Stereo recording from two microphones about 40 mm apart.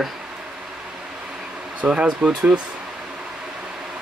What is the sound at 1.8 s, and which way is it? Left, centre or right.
Speech, right.